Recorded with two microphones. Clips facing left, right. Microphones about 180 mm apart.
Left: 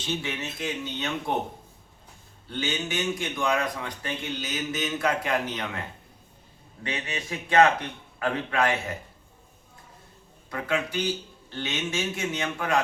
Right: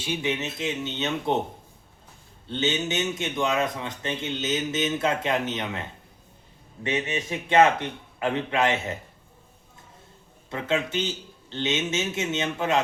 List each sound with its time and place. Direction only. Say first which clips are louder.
0.0 s a man's voice: right 3 dB; 15° right (ahead or behind)
2.5 s a man's voice: right 4 dB; 25° right (ahead or behind)
6.8 s a man's voice: right 6 dB; 20° right (ahead or behind)
10.5 s a man's voice: right 2 dB; 25° right (ahead or behind)